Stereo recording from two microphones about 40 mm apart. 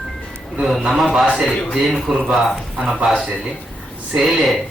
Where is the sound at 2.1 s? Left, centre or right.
Centre.